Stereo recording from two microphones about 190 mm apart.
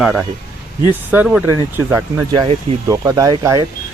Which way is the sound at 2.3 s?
20° right (ahead or behind).